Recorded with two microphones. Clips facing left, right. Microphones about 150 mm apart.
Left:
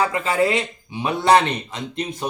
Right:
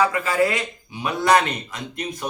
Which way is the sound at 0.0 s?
25° left (ahead or behind).